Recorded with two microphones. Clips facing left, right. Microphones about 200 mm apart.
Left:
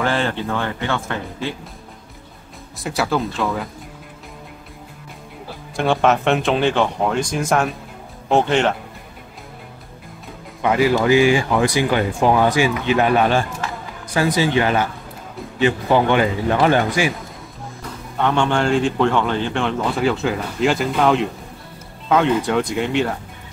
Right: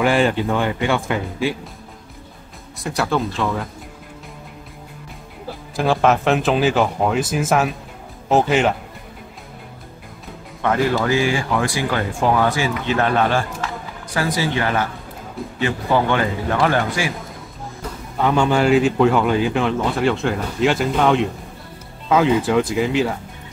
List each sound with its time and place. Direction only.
0.0 s speech: 10° right (ahead or behind)
2.8 s speech: centre (ahead or behind)
5.8 s speech: centre (ahead or behind)
10.6 s speech: 10° left (ahead or behind)
18.1 s speech: 5° right (ahead or behind)